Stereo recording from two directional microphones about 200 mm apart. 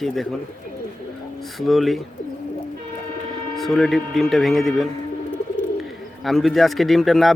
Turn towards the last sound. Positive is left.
turn(degrees=0)  # may be behind; listen again after turning